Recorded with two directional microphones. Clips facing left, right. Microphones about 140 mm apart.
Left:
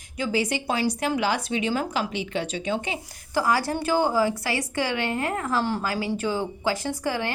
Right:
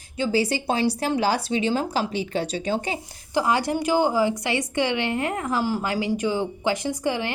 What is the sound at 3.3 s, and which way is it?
A woman's voice, 20° right (ahead or behind).